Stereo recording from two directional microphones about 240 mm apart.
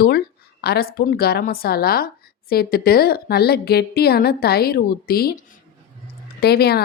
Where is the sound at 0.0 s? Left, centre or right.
Left.